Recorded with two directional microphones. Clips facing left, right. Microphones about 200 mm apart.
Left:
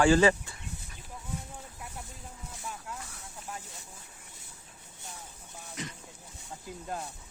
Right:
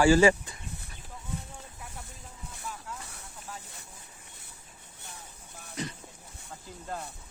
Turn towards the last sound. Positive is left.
turn(degrees=-35)  # may be behind; listen again after turning